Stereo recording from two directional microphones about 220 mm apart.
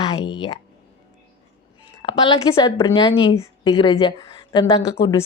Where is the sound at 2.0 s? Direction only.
25° left (ahead or behind).